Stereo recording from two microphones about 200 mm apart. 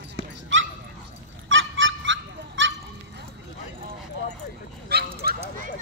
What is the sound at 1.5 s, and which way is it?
Goose, 70° right (ahead or behind).